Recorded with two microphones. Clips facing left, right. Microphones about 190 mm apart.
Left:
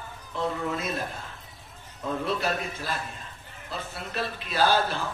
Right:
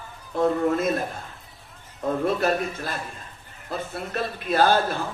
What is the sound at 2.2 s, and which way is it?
A man's voice, 50° right (ahead or behind).